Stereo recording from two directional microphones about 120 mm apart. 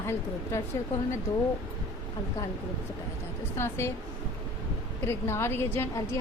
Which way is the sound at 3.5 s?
20° left (ahead or behind).